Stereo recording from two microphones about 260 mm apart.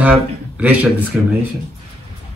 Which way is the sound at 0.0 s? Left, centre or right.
Centre.